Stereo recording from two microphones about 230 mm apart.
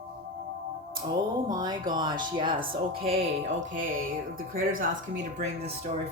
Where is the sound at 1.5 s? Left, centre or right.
Centre.